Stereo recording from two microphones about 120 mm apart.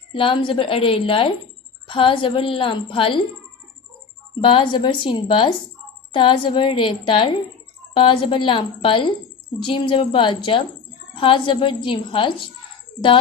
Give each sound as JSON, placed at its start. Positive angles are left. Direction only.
{"t": 0.1, "sound": "a woman's voice", "side_deg": 45}
{"t": 4.4, "sound": "a woman's voice", "side_deg": 40}